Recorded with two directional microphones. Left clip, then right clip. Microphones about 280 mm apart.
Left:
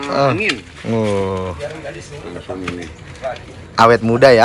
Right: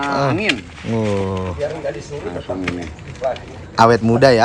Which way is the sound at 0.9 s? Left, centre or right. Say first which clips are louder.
Left 3 dB; centre.